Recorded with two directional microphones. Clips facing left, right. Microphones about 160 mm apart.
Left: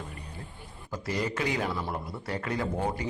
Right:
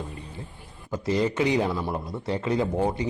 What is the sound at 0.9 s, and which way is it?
A man's voice, 20° right (ahead or behind).